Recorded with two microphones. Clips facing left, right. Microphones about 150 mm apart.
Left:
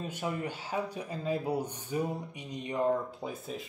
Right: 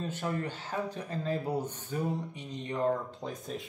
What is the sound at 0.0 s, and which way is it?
Speech, 10° left (ahead or behind).